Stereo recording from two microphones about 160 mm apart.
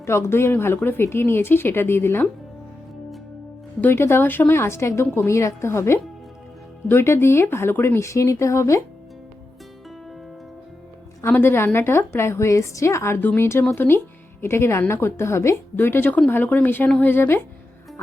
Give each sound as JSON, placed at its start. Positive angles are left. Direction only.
{"t": 0.0, "sound": "a woman's voice", "side_deg": 15}
{"t": 3.8, "sound": "a woman's voice", "side_deg": 15}
{"t": 11.2, "sound": "a woman's voice", "side_deg": 15}